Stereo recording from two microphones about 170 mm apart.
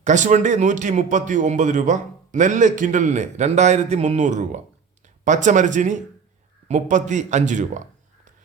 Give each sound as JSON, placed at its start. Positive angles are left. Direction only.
{"t": 0.0, "sound": "a man's voice", "side_deg": -45}